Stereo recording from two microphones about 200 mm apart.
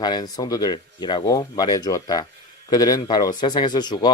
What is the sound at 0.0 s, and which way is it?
Speech, 20° left (ahead or behind).